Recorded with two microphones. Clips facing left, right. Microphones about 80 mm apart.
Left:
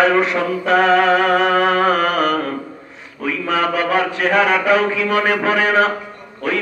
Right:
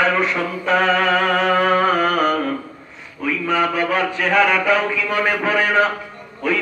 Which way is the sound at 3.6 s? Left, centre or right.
Centre.